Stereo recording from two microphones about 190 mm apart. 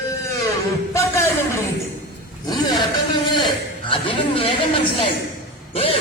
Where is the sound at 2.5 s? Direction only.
25° left (ahead or behind).